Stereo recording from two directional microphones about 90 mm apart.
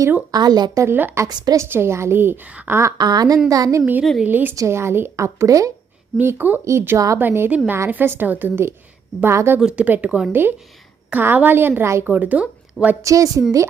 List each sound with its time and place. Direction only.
0.3 s a woman's voice: 50° right (ahead or behind)
0.8 s a woman's voice: 25° right (ahead or behind)
1.3 s a woman's voice: 50° right (ahead or behind)
1.5 s a woman's voice: 25° right (ahead or behind)
2.6 s a woman's voice: 30° right (ahead or behind)
3.0 s a woman's voice: 45° right (ahead or behind)
4.2 s a woman's voice: 20° right (ahead or behind)
4.5 s a woman's voice: 30° right (ahead or behind)
6.1 s a woman's voice: 20° right (ahead or behind)
6.7 s a woman's voice: 30° right (ahead or behind)
7.2 s a woman's voice: 25° right (ahead or behind)
9.6 s a woman's voice: 10° right (ahead or behind); by 12.1 s 30° right (ahead or behind)
12.1 s a woman's voice: 15° right (ahead or behind)
13.0 s a woman's voice: 40° right (ahead or behind)